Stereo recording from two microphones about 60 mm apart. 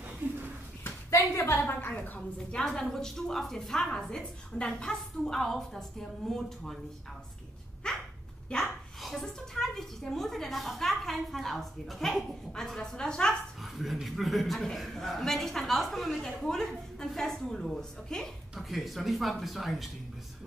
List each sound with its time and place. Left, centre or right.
0.8 s a sound: left
2.0 s a woman's voice: left
7.8 s dog: centre
9.0 s a woman's voice: centre
13.6 s dog: centre
14.0 s a man's voice: centre